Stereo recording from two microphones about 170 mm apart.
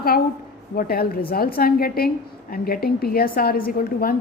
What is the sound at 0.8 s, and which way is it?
A woman's voice, 60° left (ahead or behind).